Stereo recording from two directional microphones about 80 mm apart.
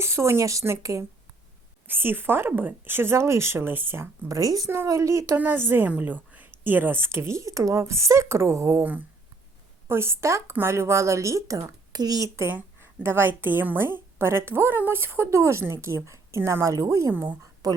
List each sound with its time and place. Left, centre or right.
0.0 s speech: right
1.9 s speech: right
4.3 s speech: right
4.7 s a woman's voice: right
8.8 s a woman's voice: right
12.5 s a woman's voice: right
17.6 s a sound: right